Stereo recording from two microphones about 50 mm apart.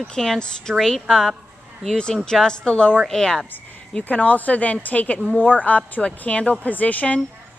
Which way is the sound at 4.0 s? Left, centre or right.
Left.